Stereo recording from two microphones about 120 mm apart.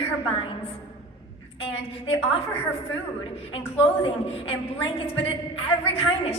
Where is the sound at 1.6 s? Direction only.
50° left (ahead or behind).